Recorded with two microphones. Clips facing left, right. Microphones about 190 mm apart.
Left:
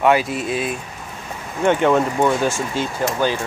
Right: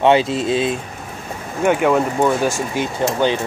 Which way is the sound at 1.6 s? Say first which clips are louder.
Even; 5° right (ahead or behind).